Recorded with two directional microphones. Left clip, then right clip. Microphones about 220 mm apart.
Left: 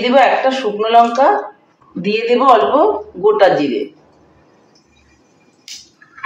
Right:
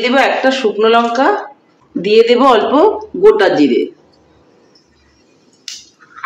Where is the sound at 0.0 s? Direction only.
50° right (ahead or behind).